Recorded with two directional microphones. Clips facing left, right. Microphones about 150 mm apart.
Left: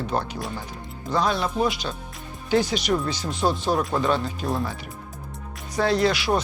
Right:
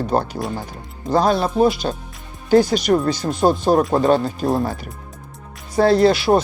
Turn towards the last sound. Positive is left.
turn(degrees=-35)  # may be behind; listen again after turning